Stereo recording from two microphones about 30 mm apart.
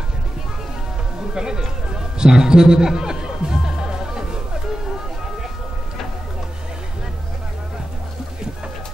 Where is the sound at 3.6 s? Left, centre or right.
Centre.